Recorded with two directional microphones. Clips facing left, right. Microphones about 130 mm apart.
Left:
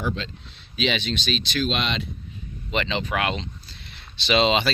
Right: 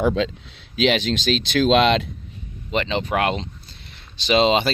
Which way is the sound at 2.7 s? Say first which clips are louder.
Right 4 dB; 40° right (ahead or behind).